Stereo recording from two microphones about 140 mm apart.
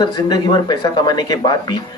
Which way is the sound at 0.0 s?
30° left (ahead or behind).